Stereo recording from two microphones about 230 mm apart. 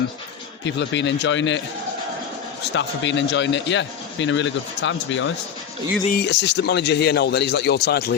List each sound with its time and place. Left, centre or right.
0.6 s a man's voice: left